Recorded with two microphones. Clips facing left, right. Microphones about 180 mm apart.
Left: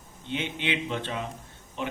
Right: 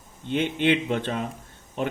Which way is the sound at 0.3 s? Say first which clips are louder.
Right 8 dB; 50° right (ahead or behind).